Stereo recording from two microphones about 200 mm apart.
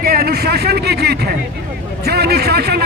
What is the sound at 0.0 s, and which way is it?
A man's voice, 50° right (ahead or behind).